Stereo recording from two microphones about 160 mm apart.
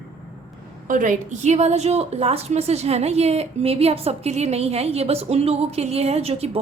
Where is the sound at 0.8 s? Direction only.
55° right (ahead or behind).